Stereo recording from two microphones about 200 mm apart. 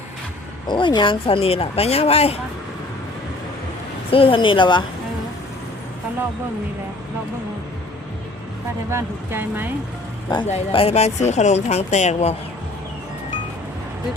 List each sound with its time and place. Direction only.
0.7 s speech: 25° left (ahead or behind)
4.1 s speech: 25° left (ahead or behind)
8.9 s speech: 10° right (ahead or behind)
10.3 s speech: 25° left (ahead or behind)